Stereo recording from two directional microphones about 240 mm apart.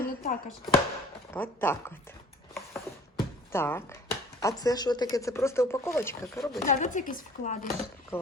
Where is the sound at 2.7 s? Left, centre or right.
Centre.